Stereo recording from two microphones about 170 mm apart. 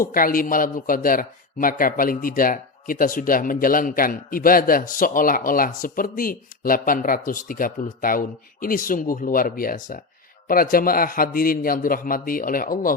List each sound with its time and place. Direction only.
0.0 s a man's voice: 55° left (ahead or behind)